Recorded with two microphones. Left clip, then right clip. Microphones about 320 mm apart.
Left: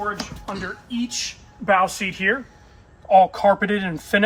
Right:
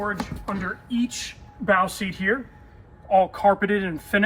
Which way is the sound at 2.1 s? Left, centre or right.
Left.